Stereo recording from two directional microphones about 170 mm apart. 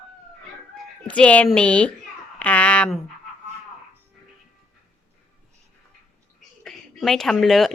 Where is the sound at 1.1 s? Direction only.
10° left (ahead or behind).